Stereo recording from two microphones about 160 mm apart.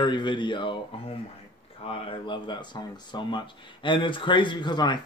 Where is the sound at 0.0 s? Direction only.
30° left (ahead or behind).